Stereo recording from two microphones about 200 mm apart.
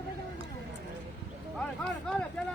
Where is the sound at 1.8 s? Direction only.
5° left (ahead or behind).